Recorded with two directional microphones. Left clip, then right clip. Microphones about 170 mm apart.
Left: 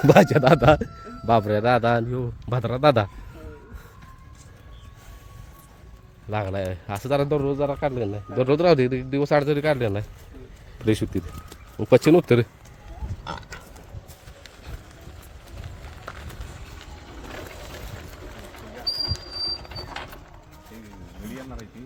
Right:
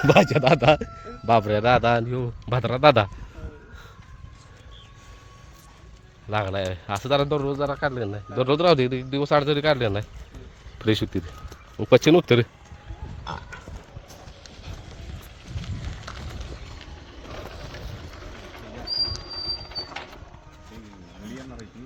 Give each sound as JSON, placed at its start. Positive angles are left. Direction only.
{"t": 0.0, "sound": "a man's voice", "side_deg": 35}
{"t": 1.3, "sound": "a man's voice", "side_deg": 20}
{"t": 6.3, "sound": "a man's voice", "side_deg": 10}
{"t": 7.3, "sound": "a man's voice", "side_deg": 25}
{"t": 9.5, "sound": "a man's voice", "side_deg": 10}
{"t": 15.6, "sound": "a sound", "side_deg": 60}
{"t": 21.3, "sound": "a sound", "side_deg": 5}